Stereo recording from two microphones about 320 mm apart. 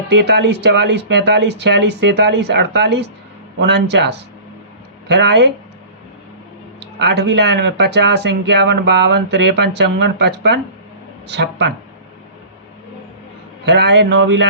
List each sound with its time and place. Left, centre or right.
0.1 s speech: right
7.0 s speech: right
13.7 s speech: right